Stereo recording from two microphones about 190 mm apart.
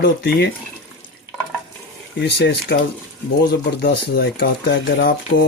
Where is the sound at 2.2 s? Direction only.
60° left (ahead or behind).